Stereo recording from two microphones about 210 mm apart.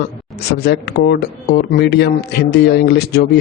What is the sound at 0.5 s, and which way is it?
Speech, 50° left (ahead or behind).